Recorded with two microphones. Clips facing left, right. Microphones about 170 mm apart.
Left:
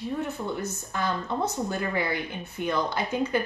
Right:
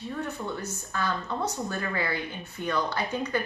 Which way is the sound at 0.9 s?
20° left (ahead or behind).